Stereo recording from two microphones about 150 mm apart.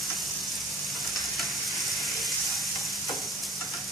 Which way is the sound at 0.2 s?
Centre (ahead or behind).